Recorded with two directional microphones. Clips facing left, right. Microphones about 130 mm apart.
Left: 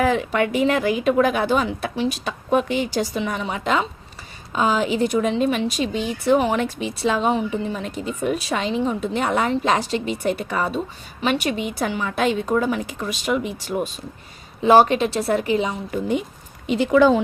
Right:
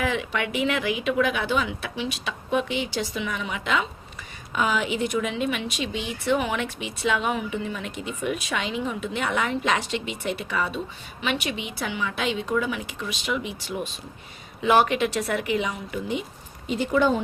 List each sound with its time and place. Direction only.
0.0 s a woman's voice: 40° left (ahead or behind)
14.6 s a woman's voice: 35° left (ahead or behind)
16.6 s speech: 90° left